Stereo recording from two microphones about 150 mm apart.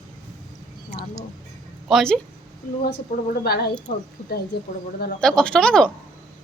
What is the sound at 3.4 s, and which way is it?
Speech, 90° left.